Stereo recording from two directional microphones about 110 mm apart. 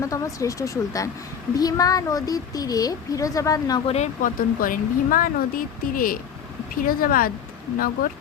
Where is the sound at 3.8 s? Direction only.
75° left (ahead or behind).